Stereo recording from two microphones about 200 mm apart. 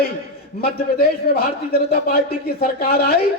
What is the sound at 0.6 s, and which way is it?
A man's voice, 50° left (ahead or behind).